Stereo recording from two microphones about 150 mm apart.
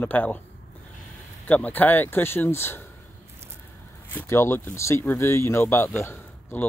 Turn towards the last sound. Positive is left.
turn(degrees=15)  # may be behind; listen again after turning